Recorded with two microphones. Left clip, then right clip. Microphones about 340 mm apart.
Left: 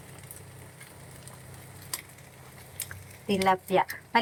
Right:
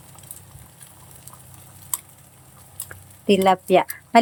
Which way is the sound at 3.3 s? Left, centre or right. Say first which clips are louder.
Right 8 dB; centre.